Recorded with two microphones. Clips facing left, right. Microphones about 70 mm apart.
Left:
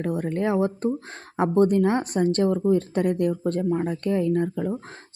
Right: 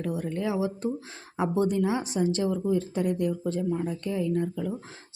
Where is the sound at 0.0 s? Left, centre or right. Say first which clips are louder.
Left 5 dB; left.